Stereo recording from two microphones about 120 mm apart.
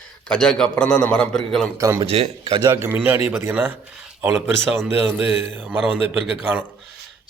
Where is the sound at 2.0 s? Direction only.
60° right (ahead or behind).